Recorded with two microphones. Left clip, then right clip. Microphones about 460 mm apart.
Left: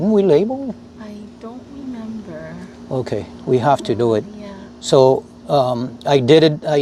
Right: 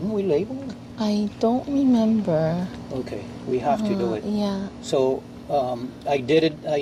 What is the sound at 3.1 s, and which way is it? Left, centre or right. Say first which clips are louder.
Speech: left 9 dB; left.